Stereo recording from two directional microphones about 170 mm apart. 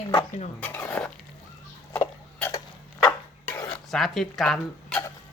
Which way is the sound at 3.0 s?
15° left (ahead or behind).